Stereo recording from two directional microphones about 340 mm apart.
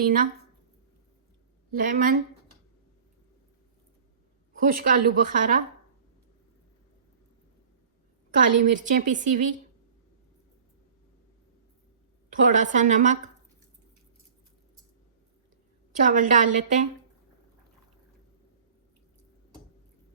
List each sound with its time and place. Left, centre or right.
0.0 s a woman's voice: right
1.8 s a woman's voice: right
4.7 s a woman's voice: right
8.4 s a woman's voice: right
12.3 s a woman's voice: right
16.0 s a woman's voice: right